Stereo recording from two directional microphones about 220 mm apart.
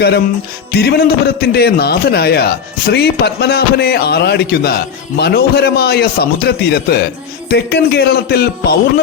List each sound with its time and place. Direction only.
0.7 s a man's voice: 45° left (ahead or behind)